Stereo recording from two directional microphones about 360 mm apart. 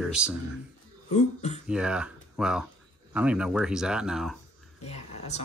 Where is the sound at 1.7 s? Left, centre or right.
Centre.